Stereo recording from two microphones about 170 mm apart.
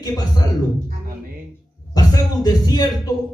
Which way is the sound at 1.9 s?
20° left (ahead or behind).